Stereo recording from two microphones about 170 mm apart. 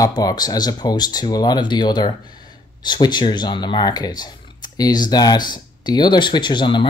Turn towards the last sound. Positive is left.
turn(degrees=30)  # may be behind; listen again after turning